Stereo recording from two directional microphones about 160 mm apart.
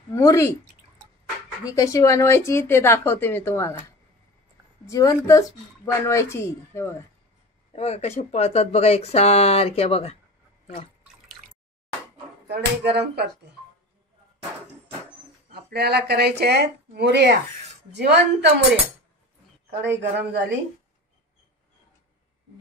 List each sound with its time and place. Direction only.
0.1 s a woman's voice: 20° left (ahead or behind)
1.6 s a woman's voice: 20° left (ahead or behind)
4.8 s a woman's voice: 20° left (ahead or behind)
7.7 s speech: 40° left (ahead or behind)
12.4 s speech: 90° right
15.5 s speech: 85° right
20.0 s speech: 90° right